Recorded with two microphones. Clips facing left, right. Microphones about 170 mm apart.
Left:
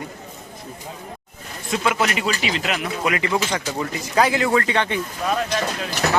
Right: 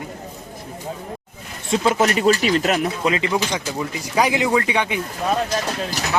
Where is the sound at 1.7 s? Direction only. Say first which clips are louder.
Right 4 dB; 35° right (ahead or behind).